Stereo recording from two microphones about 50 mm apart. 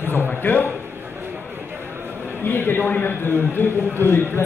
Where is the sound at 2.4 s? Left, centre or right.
Left.